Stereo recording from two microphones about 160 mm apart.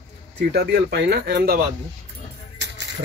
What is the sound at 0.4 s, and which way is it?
Speech, 90° right.